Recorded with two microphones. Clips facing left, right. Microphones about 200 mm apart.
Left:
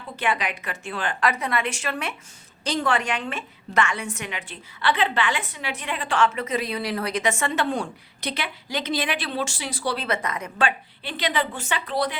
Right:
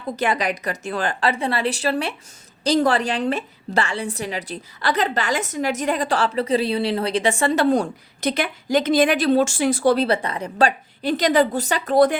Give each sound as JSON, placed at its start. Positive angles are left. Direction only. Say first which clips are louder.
{"t": 0.2, "sound": "a woman's voice", "louder": "right 3 dB", "side_deg": -40}